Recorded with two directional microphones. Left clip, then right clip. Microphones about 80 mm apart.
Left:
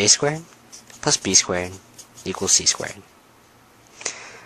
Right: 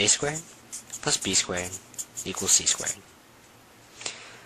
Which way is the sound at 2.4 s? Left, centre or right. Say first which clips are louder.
Left 5 dB; left.